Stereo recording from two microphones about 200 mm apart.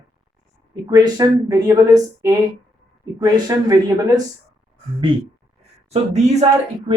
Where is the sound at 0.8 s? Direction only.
20° right (ahead or behind).